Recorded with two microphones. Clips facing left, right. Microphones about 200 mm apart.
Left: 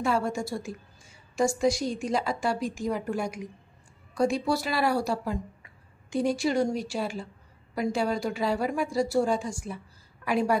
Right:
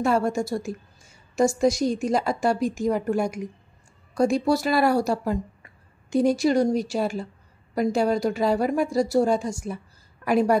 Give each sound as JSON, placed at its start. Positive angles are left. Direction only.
{"t": 0.0, "sound": "a woman's voice", "side_deg": -45}